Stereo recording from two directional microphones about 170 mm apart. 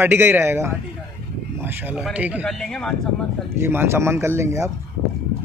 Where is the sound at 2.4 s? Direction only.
5° left (ahead or behind).